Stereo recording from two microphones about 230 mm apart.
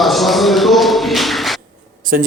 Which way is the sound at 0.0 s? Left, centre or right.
Centre.